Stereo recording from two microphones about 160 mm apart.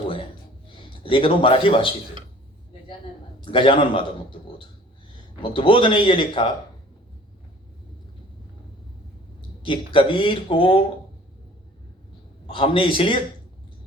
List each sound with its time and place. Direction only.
0.8 s speech: 35° left (ahead or behind)
3.4 s a man's voice: 35° left (ahead or behind)
9.6 s a man's voice: 35° left (ahead or behind)
12.5 s a man's voice: 35° left (ahead or behind)